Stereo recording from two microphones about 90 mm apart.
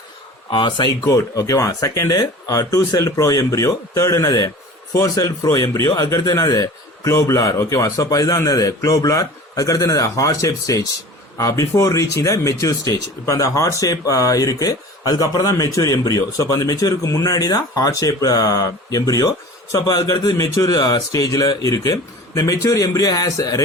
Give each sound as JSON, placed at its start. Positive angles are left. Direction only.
{"t": 0.5, "sound": "speech", "side_deg": 60}
{"t": 1.0, "sound": "speech", "side_deg": 40}